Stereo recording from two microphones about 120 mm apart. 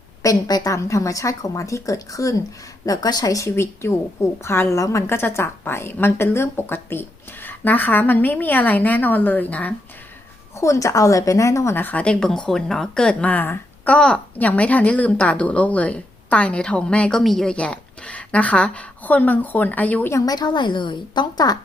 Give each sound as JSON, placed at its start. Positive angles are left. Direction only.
{"t": 0.2, "sound": "a woman's voice", "side_deg": 30}
{"t": 10.6, "sound": "a woman's voice", "side_deg": 25}
{"t": 20.1, "sound": "a woman's voice", "side_deg": 35}